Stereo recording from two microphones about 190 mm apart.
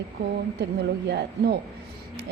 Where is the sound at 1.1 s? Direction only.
60° right (ahead or behind).